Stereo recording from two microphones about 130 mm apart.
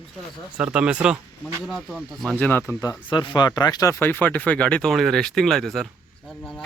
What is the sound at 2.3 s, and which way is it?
Speech, 10° left (ahead or behind).